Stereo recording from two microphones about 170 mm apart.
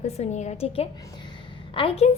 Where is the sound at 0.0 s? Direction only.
40° left (ahead or behind).